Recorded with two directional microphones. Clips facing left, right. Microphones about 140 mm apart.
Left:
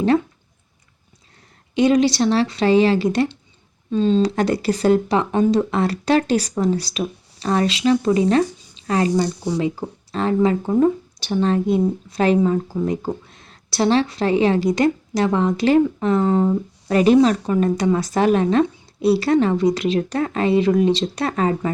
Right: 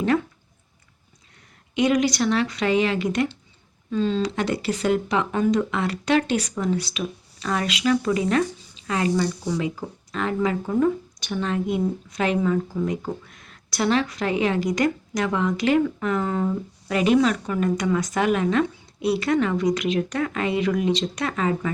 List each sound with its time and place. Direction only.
1.7 s speech: 30° left (ahead or behind)